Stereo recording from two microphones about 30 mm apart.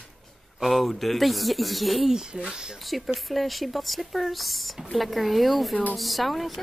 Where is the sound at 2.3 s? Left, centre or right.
Right.